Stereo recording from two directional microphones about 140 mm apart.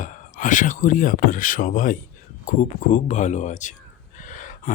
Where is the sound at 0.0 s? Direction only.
70° left (ahead or behind).